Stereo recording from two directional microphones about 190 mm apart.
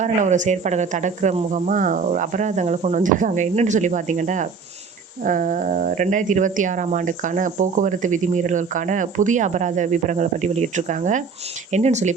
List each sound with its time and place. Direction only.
0.0 s speech: 40° right (ahead or behind)